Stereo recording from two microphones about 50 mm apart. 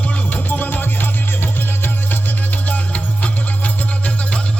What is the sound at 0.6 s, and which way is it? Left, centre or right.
Music, left.